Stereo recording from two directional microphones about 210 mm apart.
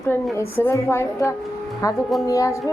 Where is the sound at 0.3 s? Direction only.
10° left (ahead or behind).